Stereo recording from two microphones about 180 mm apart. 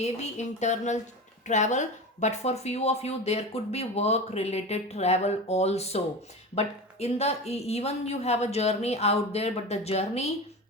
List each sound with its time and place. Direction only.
0.0 s speech: 40° left (ahead or behind)